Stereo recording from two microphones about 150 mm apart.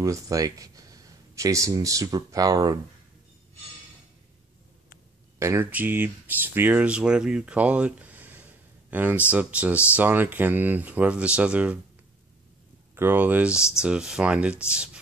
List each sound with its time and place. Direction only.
0.0 s speech: 20° right (ahead or behind)
5.4 s speech: 15° right (ahead or behind)
12.9 s speech: 15° right (ahead or behind)